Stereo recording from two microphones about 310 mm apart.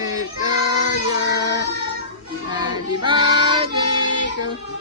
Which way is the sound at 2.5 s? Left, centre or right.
Centre.